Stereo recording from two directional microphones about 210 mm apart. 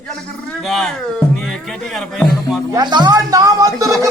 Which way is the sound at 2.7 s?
20° right (ahead or behind).